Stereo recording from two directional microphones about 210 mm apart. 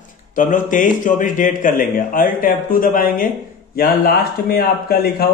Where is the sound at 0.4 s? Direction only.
40° left (ahead or behind).